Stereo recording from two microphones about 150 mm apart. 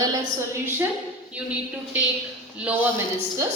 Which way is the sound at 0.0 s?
20° right (ahead or behind).